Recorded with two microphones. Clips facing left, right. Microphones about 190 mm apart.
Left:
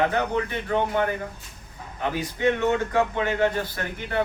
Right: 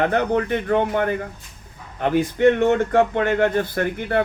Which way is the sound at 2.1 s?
55° right (ahead or behind).